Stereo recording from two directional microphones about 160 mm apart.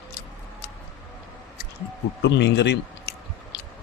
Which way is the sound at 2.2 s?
90° left.